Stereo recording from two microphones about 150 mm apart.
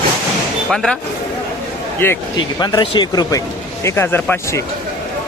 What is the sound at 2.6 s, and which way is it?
Speech, 30° left (ahead or behind).